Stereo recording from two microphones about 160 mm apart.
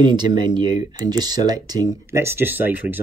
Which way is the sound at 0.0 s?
30° right (ahead or behind).